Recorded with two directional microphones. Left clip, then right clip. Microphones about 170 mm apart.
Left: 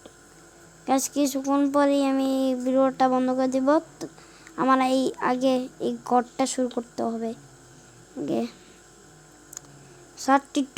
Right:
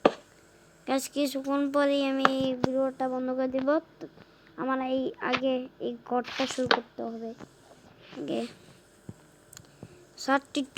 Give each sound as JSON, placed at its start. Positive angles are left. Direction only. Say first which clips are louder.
{"t": 0.9, "sound": "a woman's voice", "louder": "left 5 dB", "side_deg": 5}
{"t": 4.5, "sound": "a woman's voice", "louder": "left 9 dB", "side_deg": 30}
{"t": 4.8, "sound": "speech", "louder": "left 7 dB", "side_deg": 10}
{"t": 7.0, "sound": "speech", "louder": "left 8 dB", "side_deg": 20}
{"t": 8.2, "sound": "a woman's voice", "louder": "left 5 dB", "side_deg": 5}
{"t": 10.2, "sound": "a woman's voice", "louder": "left 5 dB", "side_deg": 0}